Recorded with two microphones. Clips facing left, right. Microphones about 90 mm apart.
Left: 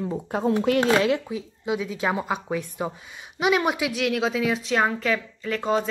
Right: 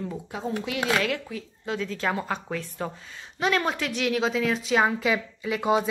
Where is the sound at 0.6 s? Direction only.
45° left (ahead or behind).